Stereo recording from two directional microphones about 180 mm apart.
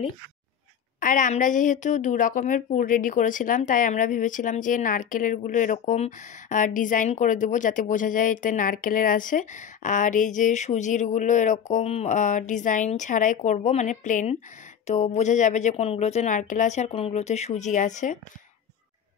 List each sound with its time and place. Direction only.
0.9 s a woman's voice: 45° left (ahead or behind)